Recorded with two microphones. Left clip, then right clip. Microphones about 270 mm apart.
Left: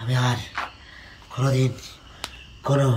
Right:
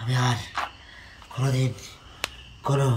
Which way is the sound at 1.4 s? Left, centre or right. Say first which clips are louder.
Left 5 dB; centre.